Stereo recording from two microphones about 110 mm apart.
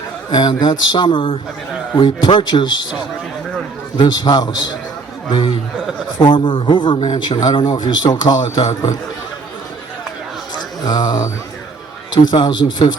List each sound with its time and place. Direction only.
0.3 s a man's voice: 40° left (ahead or behind)
3.9 s a man's voice: 40° left (ahead or behind)
10.8 s a man's voice: 40° left (ahead or behind)